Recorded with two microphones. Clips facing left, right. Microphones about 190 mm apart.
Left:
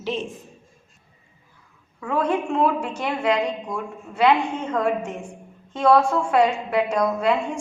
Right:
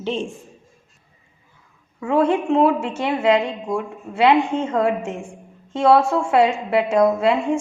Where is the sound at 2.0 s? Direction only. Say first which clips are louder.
Right 5 dB; 25° right (ahead or behind).